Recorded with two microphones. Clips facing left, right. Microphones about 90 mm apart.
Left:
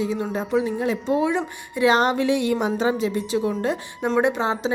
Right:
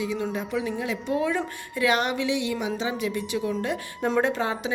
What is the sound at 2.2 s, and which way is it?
Speech, 50° left (ahead or behind).